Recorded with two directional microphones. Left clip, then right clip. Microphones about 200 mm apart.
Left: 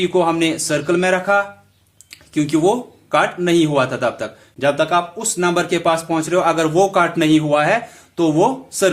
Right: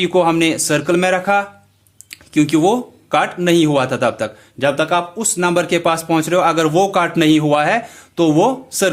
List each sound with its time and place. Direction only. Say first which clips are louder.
0.0 s speech: right 2 dB; 40° right (ahead or behind)